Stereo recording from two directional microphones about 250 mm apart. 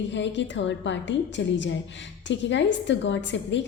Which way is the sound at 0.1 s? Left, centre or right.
Left.